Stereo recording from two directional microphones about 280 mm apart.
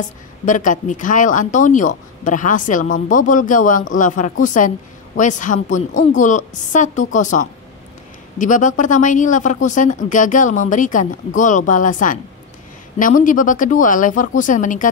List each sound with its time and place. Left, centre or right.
0.5 s speech: left